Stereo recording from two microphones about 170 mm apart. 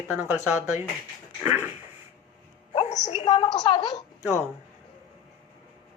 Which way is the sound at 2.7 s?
40° left (ahead or behind).